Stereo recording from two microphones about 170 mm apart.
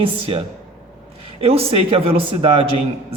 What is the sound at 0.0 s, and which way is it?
A man's voice, 35° right (ahead or behind).